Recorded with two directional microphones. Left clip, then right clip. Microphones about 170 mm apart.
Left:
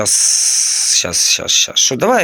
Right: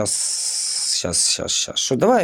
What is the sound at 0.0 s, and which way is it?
Speech, 5° right (ahead or behind).